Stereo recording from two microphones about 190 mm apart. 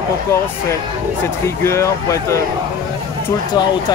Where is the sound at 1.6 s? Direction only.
15° left (ahead or behind).